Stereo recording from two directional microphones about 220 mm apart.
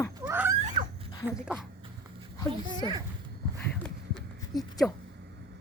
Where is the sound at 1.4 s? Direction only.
5° right (ahead or behind).